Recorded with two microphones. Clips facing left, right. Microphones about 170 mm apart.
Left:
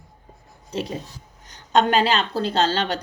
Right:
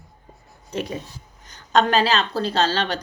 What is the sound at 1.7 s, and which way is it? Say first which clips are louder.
Speech: even; 25° left (ahead or behind).